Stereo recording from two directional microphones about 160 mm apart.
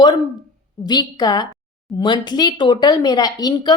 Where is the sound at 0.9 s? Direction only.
25° left (ahead or behind).